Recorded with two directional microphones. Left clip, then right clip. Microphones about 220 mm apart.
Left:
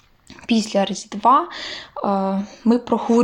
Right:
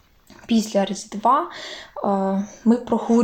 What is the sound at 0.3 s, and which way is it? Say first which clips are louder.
Speech: left 2 dB; 25° left (ahead or behind).